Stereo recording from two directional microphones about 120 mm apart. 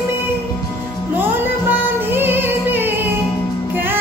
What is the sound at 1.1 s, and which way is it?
Music, 15° right (ahead or behind).